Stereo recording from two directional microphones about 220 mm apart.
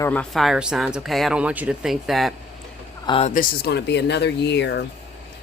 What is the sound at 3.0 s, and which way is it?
Speech, 25° left (ahead or behind).